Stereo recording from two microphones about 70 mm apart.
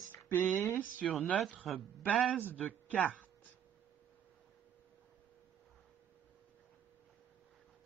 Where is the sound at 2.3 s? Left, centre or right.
Left.